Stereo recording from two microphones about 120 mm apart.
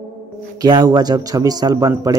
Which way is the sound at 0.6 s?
35° right (ahead or behind).